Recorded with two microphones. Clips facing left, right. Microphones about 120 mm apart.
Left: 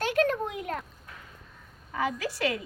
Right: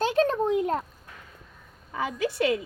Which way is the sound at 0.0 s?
30° right (ahead or behind).